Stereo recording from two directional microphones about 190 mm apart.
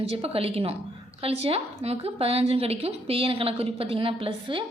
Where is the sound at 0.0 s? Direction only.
30° right (ahead or behind).